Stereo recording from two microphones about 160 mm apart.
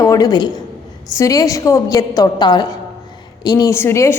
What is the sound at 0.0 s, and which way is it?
A woman's voice, 20° left (ahead or behind).